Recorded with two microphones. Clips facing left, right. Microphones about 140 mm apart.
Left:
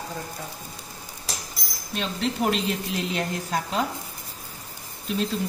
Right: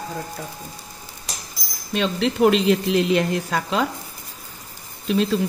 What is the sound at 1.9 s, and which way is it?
Speech, 90° right.